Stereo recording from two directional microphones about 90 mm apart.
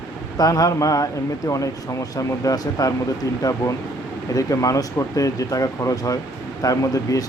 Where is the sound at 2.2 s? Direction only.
40° left (ahead or behind).